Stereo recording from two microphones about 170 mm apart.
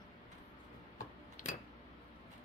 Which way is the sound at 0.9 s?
55° left (ahead or behind).